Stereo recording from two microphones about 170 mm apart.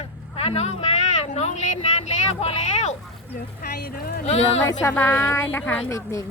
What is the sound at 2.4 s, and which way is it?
Speech, 40° left (ahead or behind).